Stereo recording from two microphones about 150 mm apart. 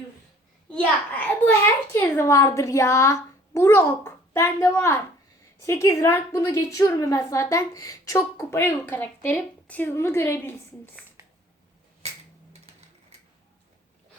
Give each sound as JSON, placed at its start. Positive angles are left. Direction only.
{"t": 0.7, "sound": "a child's voice", "side_deg": 10}
{"t": 12.0, "sound": "finger snapping", "side_deg": -45}